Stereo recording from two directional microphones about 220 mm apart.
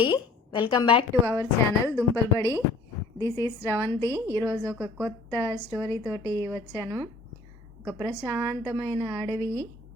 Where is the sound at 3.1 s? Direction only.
15° left (ahead or behind).